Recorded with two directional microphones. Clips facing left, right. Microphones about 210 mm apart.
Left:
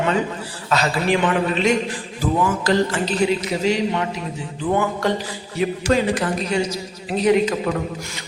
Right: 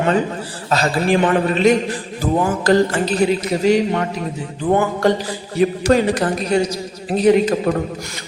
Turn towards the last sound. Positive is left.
turn(degrees=-35)  # may be behind; listen again after turning